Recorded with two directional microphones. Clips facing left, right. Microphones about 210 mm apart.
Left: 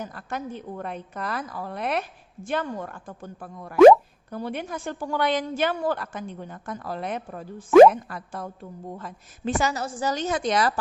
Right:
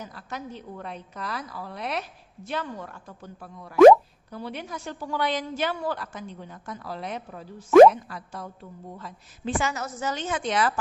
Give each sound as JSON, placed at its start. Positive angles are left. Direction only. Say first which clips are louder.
{"t": 0.0, "sound": "a woman's voice", "louder": "left 4 dB", "side_deg": 55}
{"t": 3.8, "sound": "speech", "louder": "even", "side_deg": 5}
{"t": 4.3, "sound": "a woman's voice", "louder": "left 4 dB", "side_deg": 50}